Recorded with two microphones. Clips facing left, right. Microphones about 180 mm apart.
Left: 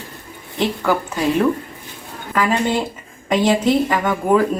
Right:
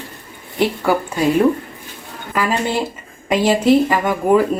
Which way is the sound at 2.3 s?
10° right (ahead or behind).